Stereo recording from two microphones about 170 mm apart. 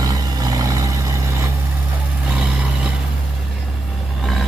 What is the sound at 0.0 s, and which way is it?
Vehicle, 20° right (ahead or behind).